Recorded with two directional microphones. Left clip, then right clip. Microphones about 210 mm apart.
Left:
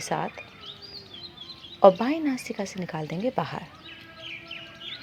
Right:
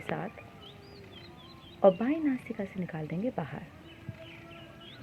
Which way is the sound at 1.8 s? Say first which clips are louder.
Left 6 dB; 35° left (ahead or behind).